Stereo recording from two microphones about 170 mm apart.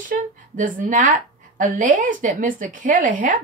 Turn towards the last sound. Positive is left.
turn(degrees=-50)  # may be behind; listen again after turning